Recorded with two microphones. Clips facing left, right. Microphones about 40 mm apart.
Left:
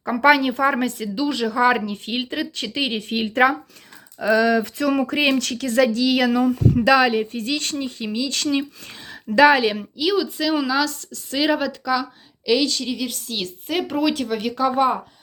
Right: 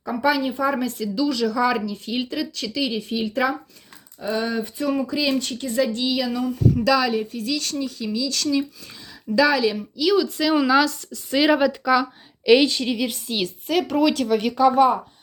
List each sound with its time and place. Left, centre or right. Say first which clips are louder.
0.0 s speech: left 5 dB; left
0.7 s a woman's voice: left 1 dB; left
4.2 s a sound: left 7 dB; left
5.0 s a woman's voice: left 3 dB; left
6.7 s speech: left 5 dB; left
10.0 s speech: right 2 dB; centre
10.4 s speech: right 4 dB; centre
12.5 s a woman's voice: right 4 dB; right
12.7 s a woman's voice: right 2 dB; centre
13.7 s speech: right 2 dB; centre